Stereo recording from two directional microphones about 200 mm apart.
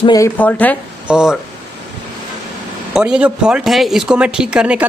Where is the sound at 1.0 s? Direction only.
5° right (ahead or behind).